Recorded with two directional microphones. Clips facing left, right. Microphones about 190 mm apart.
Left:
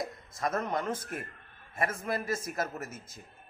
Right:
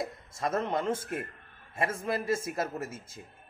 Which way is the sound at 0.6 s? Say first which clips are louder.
Right 5 dB; 25° right (ahead or behind).